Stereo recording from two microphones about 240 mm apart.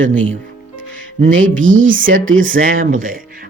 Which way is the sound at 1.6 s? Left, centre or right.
Right.